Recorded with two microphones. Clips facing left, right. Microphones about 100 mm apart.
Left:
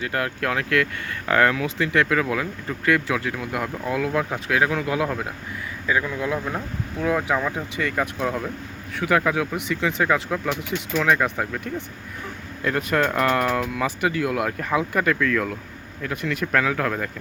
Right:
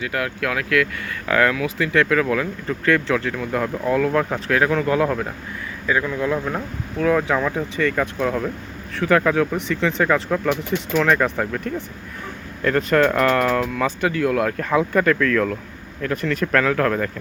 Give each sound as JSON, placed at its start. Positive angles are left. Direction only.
{"t": 0.0, "sound": "speech", "side_deg": 30}